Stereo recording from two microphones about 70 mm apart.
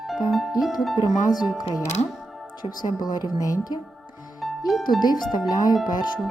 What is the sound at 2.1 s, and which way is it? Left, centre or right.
Music, centre.